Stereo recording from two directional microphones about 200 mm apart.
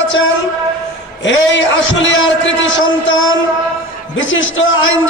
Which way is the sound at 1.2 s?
65° left (ahead or behind).